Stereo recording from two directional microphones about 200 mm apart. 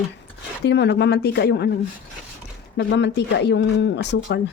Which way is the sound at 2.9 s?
60° left (ahead or behind).